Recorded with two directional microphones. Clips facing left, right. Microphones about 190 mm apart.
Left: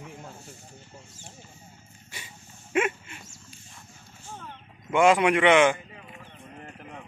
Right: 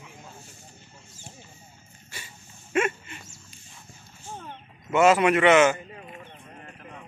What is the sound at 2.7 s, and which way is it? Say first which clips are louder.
Dog: right 1 dB; 15° left (ahead or behind).